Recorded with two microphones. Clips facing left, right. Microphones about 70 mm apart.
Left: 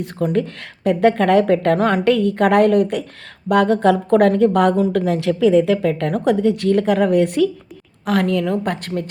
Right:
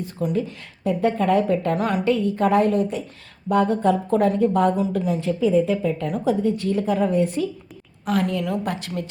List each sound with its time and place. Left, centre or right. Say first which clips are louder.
0.3 s a woman's voice: left 5 dB; left
1.8 s a woman's voice: left 6 dB; left
2.0 s a woman's voice: left 3 dB; left
3.5 s a woman's voice: left 4 dB; left